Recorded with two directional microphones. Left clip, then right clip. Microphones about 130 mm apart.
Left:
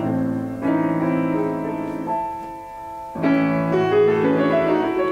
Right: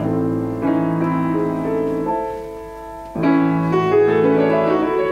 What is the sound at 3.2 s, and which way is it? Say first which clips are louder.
Music: right 2 dB; 20° right (ahead or behind).